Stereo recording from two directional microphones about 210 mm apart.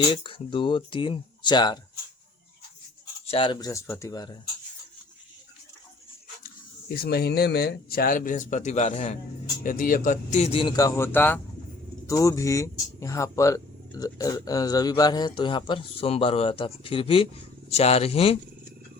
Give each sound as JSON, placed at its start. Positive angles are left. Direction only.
{"t": 0.1, "sound": "a man's voice", "side_deg": 25}
{"t": 3.2, "sound": "speech", "side_deg": 25}
{"t": 6.8, "sound": "a man's voice", "side_deg": 50}